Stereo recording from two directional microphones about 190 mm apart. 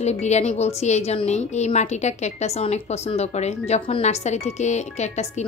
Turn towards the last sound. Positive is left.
turn(degrees=35)  # may be behind; listen again after turning